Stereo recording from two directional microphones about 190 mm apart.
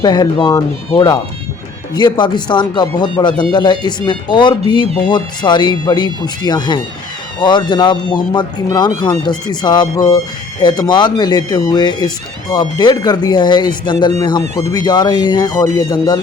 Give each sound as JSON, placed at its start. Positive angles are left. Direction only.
{"t": 0.0, "sound": "speech", "side_deg": 20}
{"t": 14.4, "sound": "speech", "side_deg": -35}
{"t": 14.7, "sound": "speech", "side_deg": 20}